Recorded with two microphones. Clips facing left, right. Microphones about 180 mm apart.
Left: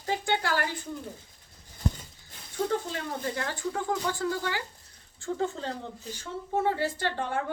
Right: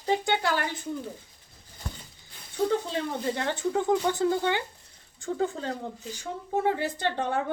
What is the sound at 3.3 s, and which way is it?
Speech, 20° right (ahead or behind).